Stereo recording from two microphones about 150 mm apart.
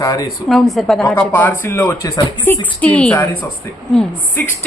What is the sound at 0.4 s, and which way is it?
Speech, centre (ahead or behind).